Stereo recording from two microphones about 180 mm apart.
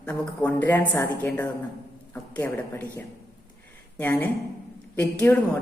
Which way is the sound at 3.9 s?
10° left (ahead or behind).